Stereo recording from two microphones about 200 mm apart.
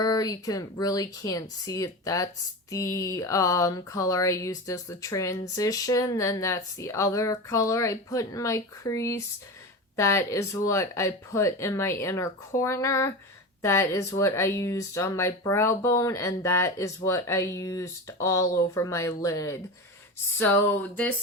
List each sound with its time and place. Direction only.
0.0 s speech: 20° left (ahead or behind)